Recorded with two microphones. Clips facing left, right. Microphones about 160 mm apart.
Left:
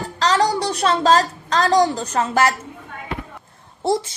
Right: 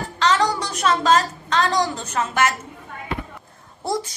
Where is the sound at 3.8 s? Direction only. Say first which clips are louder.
Left 5 dB; 25° left (ahead or behind).